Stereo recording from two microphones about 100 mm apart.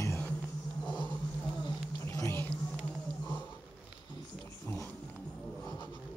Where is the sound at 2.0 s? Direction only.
25° left (ahead or behind).